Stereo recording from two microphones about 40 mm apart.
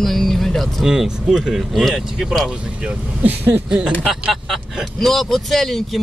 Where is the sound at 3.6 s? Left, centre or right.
Right.